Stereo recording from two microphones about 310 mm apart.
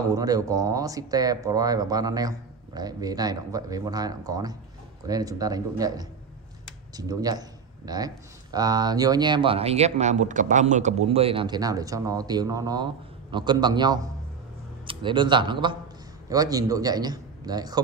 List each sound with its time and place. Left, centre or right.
0.1 s a man's voice: centre